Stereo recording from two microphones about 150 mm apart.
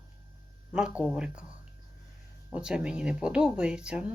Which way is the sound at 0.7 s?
5° right (ahead or behind).